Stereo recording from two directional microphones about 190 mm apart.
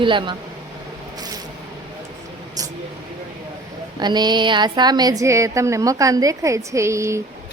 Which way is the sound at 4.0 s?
20° right (ahead or behind).